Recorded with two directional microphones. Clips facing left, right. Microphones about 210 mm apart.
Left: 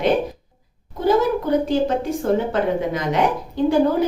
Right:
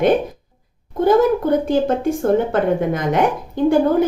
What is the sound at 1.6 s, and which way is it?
A woman's voice, 50° right (ahead or behind).